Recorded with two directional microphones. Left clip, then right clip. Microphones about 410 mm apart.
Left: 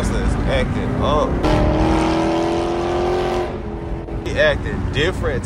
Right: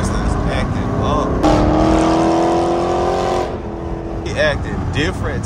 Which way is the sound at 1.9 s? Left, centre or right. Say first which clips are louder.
Right 4 dB; centre.